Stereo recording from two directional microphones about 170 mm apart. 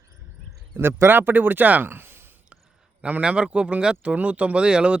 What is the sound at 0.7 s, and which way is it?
Speech, 15° right (ahead or behind).